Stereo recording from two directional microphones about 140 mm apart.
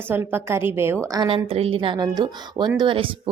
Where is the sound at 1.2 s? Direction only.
40° right (ahead or behind).